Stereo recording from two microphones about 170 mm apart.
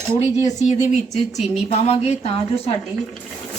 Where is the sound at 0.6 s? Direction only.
40° left (ahead or behind).